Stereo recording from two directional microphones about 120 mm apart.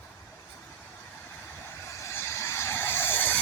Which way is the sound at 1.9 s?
25° left (ahead or behind).